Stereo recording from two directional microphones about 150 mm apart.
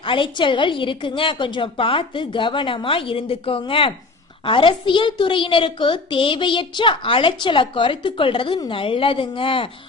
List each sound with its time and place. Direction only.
0.0 s a woman's voice: 35° left (ahead or behind)